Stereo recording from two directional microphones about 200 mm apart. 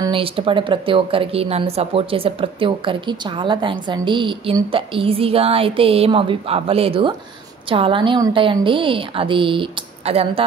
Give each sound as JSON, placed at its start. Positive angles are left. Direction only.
{"t": 0.0, "sound": "a woman's voice", "side_deg": -25}